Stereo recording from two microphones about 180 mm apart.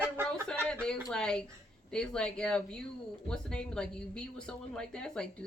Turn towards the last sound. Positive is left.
turn(degrees=5)  # may be behind; listen again after turning